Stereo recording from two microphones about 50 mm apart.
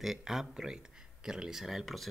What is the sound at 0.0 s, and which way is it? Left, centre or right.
Speech, centre.